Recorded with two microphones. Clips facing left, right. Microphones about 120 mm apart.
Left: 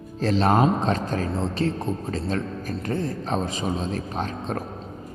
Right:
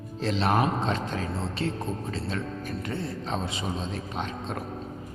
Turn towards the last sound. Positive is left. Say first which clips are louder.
# left 4 dB
turn(degrees=40)  # may be behind; listen again after turning